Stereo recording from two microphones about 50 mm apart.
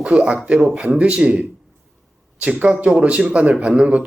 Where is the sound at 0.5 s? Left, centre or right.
Centre.